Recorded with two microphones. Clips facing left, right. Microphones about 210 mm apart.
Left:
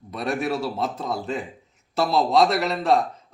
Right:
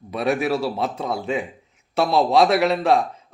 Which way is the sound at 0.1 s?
Centre (ahead or behind).